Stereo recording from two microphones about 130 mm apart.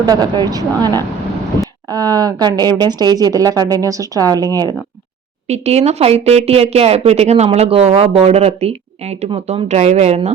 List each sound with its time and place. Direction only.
0.0 s speech: 30° right (ahead or behind)
5.5 s speech: 55° right (ahead or behind)